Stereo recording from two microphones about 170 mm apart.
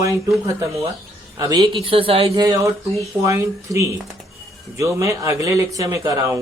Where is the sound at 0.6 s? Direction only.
20° right (ahead or behind); by 2.4 s 35° right (ahead or behind).